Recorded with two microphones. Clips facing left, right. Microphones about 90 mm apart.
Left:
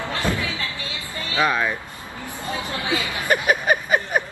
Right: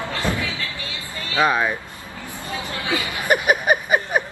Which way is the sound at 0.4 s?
20° left (ahead or behind).